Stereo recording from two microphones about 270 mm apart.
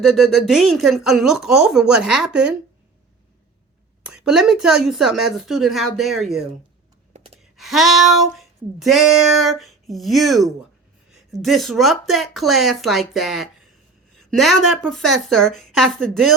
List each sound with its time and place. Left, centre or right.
0.0 s music: centre
4.0 s music: centre
7.1 s sigh: right
7.5 s music: centre